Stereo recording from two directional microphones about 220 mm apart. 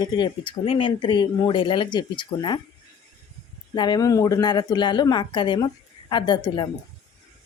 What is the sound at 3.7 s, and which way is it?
A woman's voice, 20° left (ahead or behind).